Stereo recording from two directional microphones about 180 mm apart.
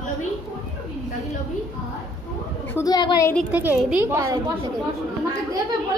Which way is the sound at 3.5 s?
10° right (ahead or behind).